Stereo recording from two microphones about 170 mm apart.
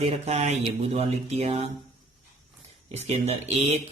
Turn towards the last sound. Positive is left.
turn(degrees=-40)  # may be behind; listen again after turning